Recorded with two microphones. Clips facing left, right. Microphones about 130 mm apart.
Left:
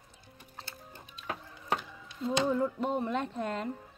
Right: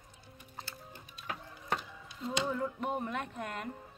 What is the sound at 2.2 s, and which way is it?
Music, 25° left (ahead or behind).